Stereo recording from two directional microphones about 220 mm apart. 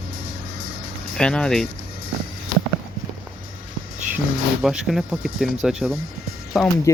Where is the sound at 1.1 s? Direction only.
5° left (ahead or behind).